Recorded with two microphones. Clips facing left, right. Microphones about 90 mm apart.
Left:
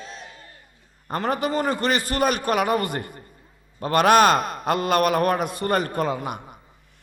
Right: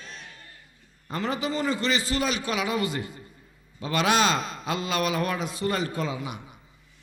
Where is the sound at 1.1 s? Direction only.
55° left (ahead or behind).